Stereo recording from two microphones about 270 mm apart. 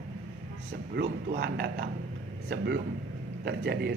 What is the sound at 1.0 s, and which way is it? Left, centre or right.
Speech, right.